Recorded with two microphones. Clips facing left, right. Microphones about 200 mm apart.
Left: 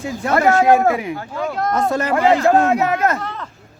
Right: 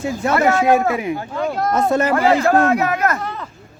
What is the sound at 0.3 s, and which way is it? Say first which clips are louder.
Speech: left 2 dB; 45° left (ahead or behind).